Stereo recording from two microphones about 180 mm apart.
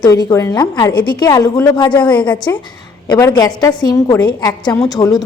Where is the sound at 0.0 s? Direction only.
20° left (ahead or behind).